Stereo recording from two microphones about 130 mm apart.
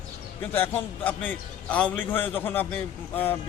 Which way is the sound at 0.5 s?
15° left (ahead or behind).